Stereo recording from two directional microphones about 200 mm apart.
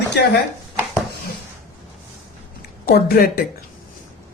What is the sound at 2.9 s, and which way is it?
Speech, 50° left (ahead or behind).